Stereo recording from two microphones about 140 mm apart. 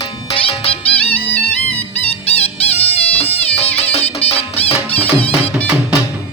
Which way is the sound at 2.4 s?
45° left (ahead or behind).